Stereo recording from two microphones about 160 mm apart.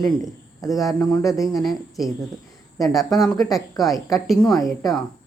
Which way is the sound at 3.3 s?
20° left (ahead or behind).